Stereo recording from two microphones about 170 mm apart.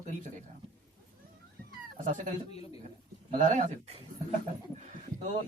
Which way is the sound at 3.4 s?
45° right (ahead or behind).